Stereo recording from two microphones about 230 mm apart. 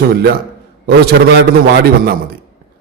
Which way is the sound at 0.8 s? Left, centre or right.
Right.